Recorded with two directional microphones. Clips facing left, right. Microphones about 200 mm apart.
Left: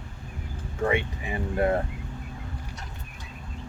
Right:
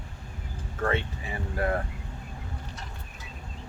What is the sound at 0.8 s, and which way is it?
Speech, 15° left (ahead or behind).